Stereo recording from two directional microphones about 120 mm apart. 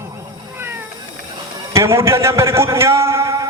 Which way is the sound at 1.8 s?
20° right (ahead or behind).